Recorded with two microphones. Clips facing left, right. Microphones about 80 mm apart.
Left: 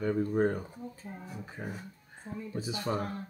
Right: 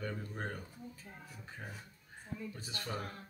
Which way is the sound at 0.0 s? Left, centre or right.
Left.